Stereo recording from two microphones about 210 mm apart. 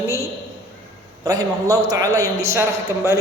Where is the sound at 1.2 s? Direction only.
15° right (ahead or behind).